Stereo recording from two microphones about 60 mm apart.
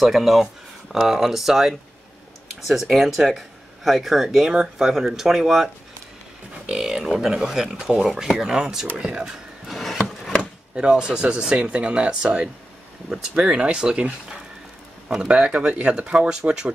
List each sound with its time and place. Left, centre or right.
0.0 s speech: centre
9.7 s a sound: centre
10.7 s speech: centre
15.0 s speech: centre